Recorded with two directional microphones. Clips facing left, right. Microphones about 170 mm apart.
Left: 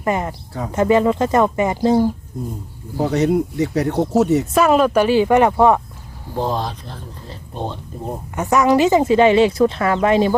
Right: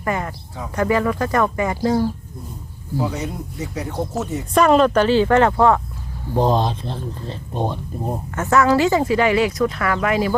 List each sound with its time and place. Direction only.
0.0 s speech: 20° left (ahead or behind)
3.0 s speech: 70° left (ahead or behind)
4.5 s speech: 5° left (ahead or behind)
6.3 s speech: 20° right (ahead or behind)
8.4 s speech: 15° left (ahead or behind)